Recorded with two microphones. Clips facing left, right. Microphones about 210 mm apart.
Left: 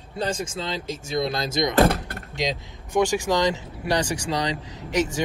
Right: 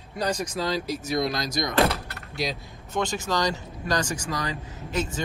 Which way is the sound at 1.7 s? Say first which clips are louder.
Left 3 dB; 50° left (ahead or behind).